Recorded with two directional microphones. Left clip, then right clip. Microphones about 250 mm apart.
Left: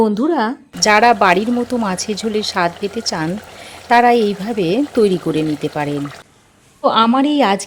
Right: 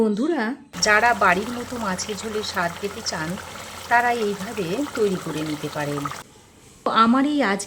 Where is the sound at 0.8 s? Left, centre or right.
Left.